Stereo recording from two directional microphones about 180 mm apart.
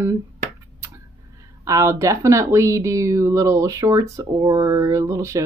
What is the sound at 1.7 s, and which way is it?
Speech, 15° right (ahead or behind).